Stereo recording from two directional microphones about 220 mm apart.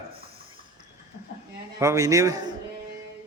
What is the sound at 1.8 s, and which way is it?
Speech, 15° right (ahead or behind).